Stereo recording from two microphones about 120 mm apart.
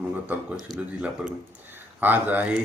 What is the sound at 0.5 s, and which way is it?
Speech, 5° right (ahead or behind).